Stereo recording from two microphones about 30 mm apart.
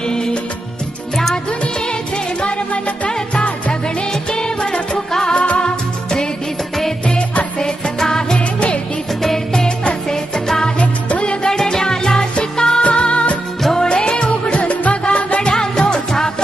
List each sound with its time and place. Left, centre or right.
0.0 s music: left
1.5 s music: left
3.1 s music: left
5.4 s music: left
7.6 s music: left
8.4 s music: left
9.2 s music: centre
10.8 s music: left
11.4 s music: left
15.4 s music: left